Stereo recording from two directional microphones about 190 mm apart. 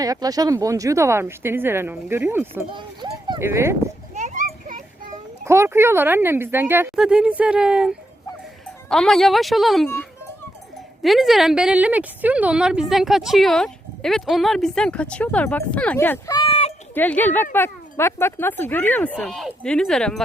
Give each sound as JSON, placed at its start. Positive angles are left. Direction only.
{"t": 0.0, "sound": "speech", "side_deg": -20}
{"t": 2.7, "sound": "speech", "side_deg": -25}
{"t": 4.1, "sound": "children playing", "side_deg": -40}
{"t": 5.5, "sound": "a woman's voice", "side_deg": -15}
{"t": 11.0, "sound": "a woman's voice", "side_deg": 0}
{"t": 16.9, "sound": "speech", "side_deg": 10}